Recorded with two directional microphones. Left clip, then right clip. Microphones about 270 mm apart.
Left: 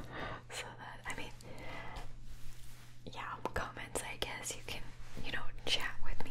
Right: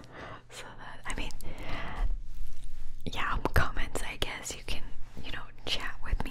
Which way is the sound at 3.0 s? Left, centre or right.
Right.